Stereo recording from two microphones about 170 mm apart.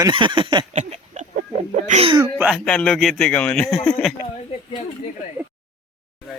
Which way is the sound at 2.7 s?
5° left (ahead or behind).